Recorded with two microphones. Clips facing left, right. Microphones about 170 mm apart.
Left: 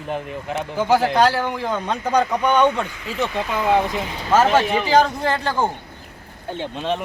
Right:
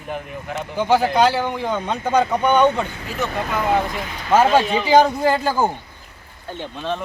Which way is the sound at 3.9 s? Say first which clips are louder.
Left 2 dB; 20° left (ahead or behind).